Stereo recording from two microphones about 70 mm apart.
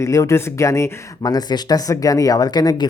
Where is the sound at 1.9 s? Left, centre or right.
Left.